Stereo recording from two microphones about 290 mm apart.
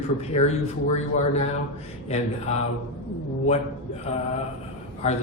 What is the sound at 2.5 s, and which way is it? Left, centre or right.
Speech, left.